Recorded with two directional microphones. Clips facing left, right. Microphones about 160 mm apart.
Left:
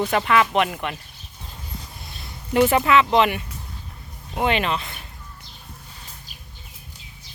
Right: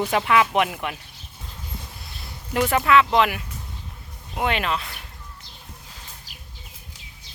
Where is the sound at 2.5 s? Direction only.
5° left (ahead or behind).